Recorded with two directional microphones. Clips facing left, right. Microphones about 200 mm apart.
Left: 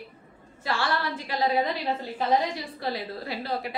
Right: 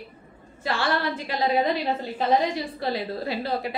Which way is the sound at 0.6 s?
20° right (ahead or behind).